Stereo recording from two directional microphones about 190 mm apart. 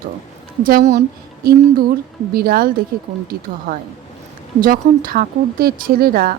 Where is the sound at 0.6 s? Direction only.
50° right (ahead or behind).